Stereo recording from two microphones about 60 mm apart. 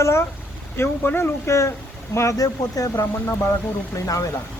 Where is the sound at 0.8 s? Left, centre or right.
Left.